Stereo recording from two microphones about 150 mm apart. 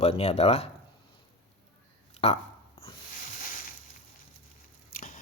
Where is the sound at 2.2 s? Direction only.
45° left (ahead or behind).